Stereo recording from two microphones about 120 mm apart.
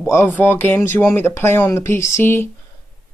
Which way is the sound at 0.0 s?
20° left (ahead or behind).